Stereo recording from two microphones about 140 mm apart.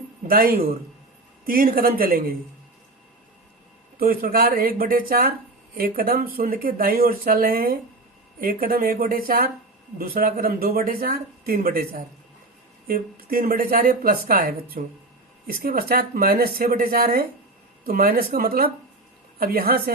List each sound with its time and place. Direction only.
0.3 s speech: 90° right
3.9 s speech: 90° right